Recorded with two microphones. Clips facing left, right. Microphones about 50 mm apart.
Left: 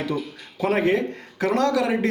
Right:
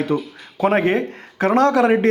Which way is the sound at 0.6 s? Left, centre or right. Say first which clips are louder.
Right 4 dB; right.